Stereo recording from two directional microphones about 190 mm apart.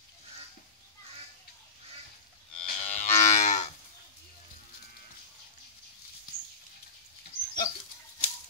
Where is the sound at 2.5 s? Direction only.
35° left (ahead or behind).